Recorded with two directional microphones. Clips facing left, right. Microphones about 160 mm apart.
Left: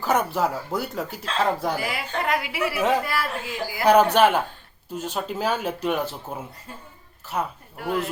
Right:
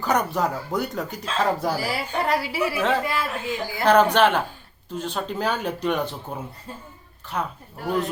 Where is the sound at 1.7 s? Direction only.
35° right (ahead or behind).